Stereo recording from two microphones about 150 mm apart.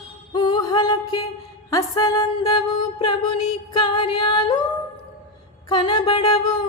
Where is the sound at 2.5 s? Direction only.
35° left (ahead or behind).